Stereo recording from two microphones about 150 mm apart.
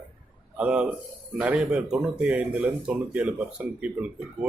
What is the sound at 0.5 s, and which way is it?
A man's voice, 5° right (ahead or behind).